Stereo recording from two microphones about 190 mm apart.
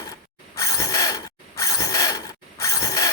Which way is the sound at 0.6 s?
20° left (ahead or behind).